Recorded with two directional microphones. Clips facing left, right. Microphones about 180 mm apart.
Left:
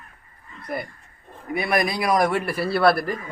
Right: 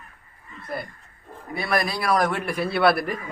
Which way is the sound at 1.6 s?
20° left (ahead or behind).